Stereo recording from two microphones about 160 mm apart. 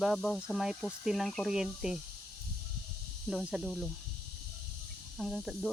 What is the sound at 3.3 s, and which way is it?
Speech, 5° right (ahead or behind).